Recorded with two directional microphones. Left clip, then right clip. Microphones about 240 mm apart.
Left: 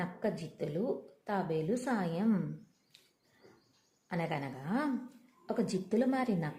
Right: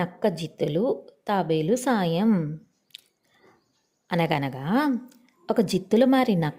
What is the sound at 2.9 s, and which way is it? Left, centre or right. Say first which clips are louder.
Chewing: right 17 dB; right.